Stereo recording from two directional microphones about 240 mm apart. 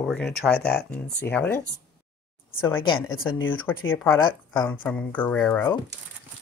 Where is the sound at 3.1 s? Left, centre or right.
Left.